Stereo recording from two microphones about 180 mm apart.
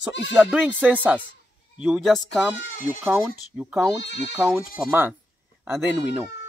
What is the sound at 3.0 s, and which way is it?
Speech, 10° right (ahead or behind).